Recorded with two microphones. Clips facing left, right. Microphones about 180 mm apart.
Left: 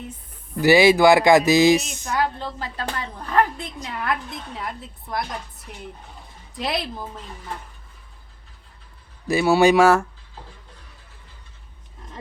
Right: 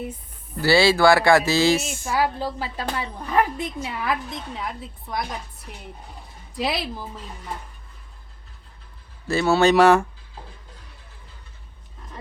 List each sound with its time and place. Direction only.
0.6 s speech: 15° left (ahead or behind)
2.0 s a woman's voice: 5° right (ahead or behind)
9.2 s a woman's voice: 15° left (ahead or behind)